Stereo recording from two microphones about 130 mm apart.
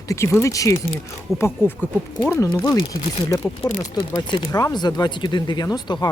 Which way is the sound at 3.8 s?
30° left (ahead or behind).